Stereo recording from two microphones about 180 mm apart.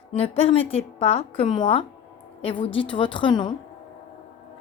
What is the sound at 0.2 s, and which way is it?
A woman's voice, 35° left (ahead or behind).